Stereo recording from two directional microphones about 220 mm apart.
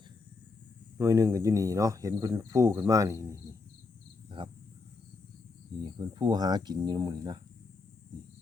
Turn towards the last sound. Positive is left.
turn(degrees=-20)  # may be behind; listen again after turning